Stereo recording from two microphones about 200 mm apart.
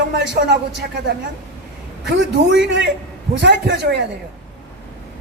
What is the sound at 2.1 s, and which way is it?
A man's voice, 65° right (ahead or behind).